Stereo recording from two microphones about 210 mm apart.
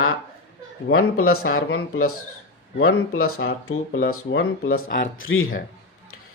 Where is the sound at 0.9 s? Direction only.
85° left.